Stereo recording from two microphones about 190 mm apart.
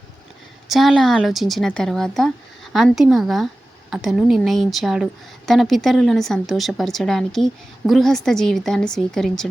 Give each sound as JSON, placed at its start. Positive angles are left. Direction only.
{"t": 0.7, "sound": "speech", "side_deg": 0}